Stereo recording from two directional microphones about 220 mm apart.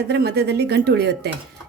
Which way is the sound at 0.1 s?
50° right (ahead or behind).